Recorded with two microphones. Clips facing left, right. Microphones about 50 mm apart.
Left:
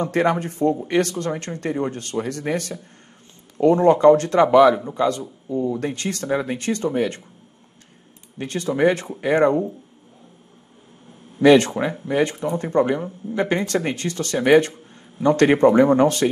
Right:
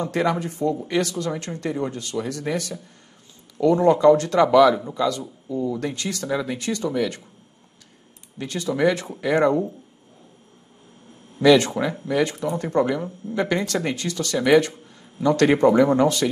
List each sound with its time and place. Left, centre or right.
0.0 s speech: left
8.4 s speech: left
11.4 s speech: left